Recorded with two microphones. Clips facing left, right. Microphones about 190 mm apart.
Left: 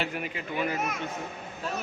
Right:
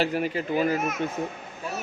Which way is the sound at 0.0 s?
35° right (ahead or behind).